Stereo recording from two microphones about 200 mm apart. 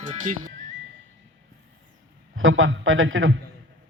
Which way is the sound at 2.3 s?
80° right.